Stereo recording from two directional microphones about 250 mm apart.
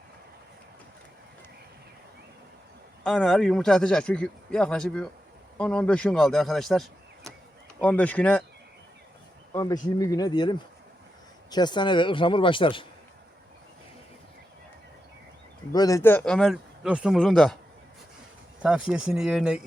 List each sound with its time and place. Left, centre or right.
3.0 s speech: centre
9.5 s speech: centre
15.7 s speech: centre
18.6 s speech: centre